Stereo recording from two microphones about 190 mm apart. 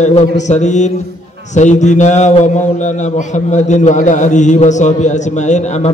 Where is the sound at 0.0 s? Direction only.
40° left (ahead or behind).